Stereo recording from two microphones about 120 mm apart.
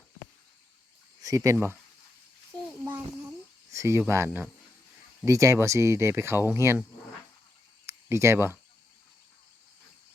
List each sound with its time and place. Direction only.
1.2 s speech: 30° right (ahead or behind)
1.5 s speech: 15° right (ahead or behind)
3.7 s cricket: 25° right (ahead or behind)
4.1 s speech: 20° right (ahead or behind)
7.9 s speech: 25° right (ahead or behind)